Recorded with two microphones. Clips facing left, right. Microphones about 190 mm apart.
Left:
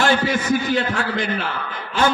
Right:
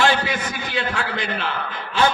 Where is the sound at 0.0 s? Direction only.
45° left (ahead or behind).